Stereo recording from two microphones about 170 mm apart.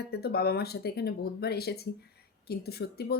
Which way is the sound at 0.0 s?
70° left (ahead or behind).